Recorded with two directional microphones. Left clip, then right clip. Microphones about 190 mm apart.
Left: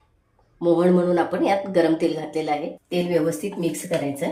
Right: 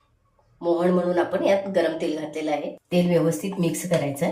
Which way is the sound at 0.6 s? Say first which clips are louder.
Left 3 dB; 35° left (ahead or behind).